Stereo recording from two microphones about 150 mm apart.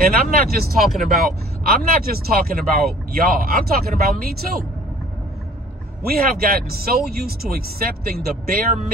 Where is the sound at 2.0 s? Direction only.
80° right.